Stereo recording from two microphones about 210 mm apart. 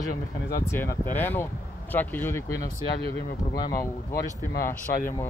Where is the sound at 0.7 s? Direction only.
10° left (ahead or behind).